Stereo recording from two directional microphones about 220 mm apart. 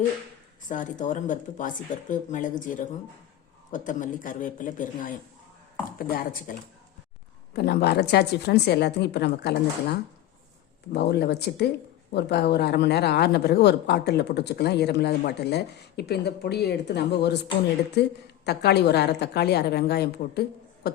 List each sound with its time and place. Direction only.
0.7 s a woman's voice: 35° left (ahead or behind)
10.9 s a woman's voice: 50° left (ahead or behind)